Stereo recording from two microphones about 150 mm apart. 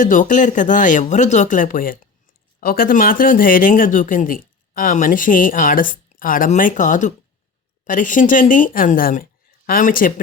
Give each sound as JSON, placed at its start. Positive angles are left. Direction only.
{"t": 0.0, "sound": "speech", "side_deg": 60}